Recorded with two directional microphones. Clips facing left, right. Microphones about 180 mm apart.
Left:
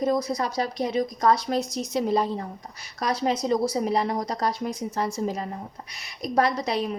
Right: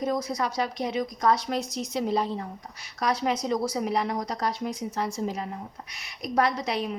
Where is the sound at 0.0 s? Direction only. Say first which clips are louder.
Left 3 dB; 35° left (ahead or behind).